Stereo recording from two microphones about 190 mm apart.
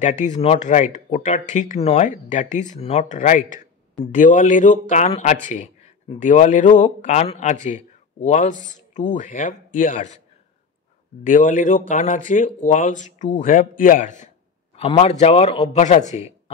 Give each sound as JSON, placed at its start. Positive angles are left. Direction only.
{"t": 0.0, "sound": "speech", "side_deg": 40}
{"t": 11.2, "sound": "speech", "side_deg": 45}
{"t": 14.8, "sound": "speech", "side_deg": 30}